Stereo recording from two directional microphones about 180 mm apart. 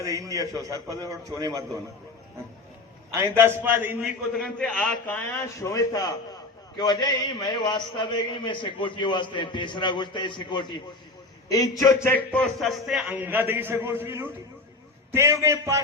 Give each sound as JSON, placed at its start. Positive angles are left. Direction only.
{"t": 0.0, "sound": "a man's voice", "side_deg": -20}
{"t": 3.1, "sound": "a man's voice", "side_deg": -15}
{"t": 4.4, "sound": "a man's voice", "side_deg": 5}